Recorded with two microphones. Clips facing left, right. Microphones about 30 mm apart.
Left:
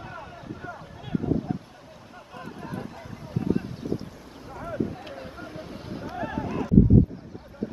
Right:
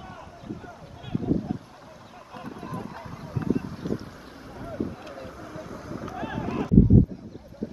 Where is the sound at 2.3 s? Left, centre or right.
Centre.